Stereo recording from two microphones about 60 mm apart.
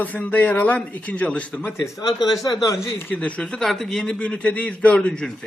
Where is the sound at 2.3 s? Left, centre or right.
Left.